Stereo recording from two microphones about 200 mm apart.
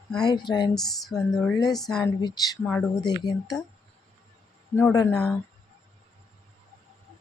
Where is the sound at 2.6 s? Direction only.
5° left (ahead or behind).